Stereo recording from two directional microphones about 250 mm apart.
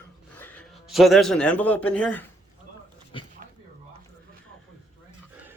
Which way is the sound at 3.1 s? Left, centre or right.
Centre.